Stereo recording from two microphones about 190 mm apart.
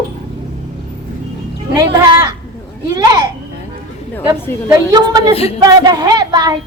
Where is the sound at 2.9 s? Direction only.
20° right (ahead or behind).